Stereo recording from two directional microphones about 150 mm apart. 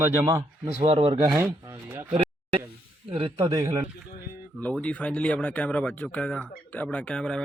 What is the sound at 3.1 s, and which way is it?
Speech, 40° right (ahead or behind).